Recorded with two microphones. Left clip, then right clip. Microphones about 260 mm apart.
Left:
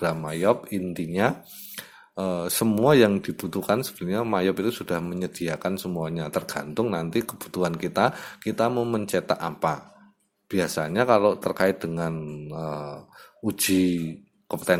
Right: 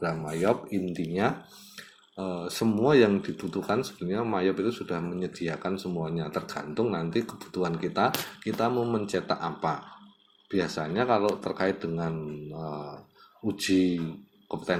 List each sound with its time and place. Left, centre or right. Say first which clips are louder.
0.0 s speech: left 4 dB; left